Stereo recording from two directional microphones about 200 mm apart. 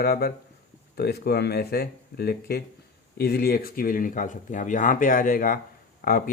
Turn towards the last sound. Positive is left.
turn(degrees=40)  # may be behind; listen again after turning